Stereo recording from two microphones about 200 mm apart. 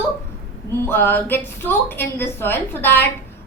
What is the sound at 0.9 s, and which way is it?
A woman's voice, 10° left (ahead or behind).